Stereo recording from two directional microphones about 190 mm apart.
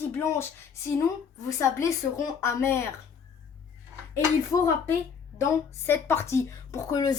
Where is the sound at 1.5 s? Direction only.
15° left (ahead or behind).